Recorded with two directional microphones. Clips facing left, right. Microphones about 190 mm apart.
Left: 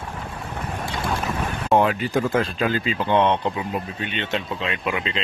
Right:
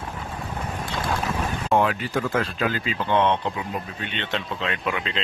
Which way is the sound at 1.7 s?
20° left (ahead or behind).